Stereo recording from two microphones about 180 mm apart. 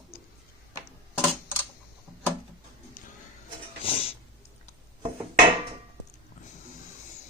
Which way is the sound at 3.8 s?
30° left (ahead or behind).